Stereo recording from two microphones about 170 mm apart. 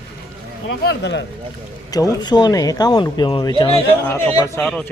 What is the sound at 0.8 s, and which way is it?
Speech, 90° left.